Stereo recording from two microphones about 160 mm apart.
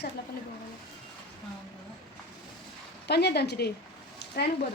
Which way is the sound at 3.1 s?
90° left.